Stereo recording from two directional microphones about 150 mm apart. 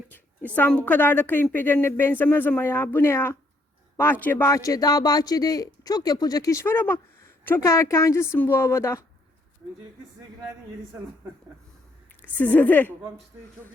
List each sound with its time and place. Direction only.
0.1 s a woman's voice: 10° left (ahead or behind)
12.2 s a woman's voice: 10° left (ahead or behind)